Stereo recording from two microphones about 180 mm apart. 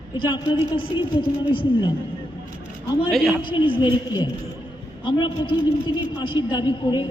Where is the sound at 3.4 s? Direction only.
25° left (ahead or behind).